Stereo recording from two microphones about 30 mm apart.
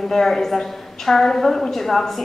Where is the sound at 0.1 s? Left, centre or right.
Centre.